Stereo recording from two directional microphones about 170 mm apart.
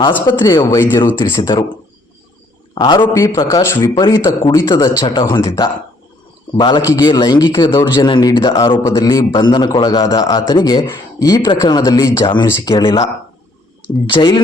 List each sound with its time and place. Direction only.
0.3 s a man's voice: 25° left (ahead or behind)
2.7 s a man's voice: 25° left (ahead or behind)
14.1 s a man's voice: 25° left (ahead or behind)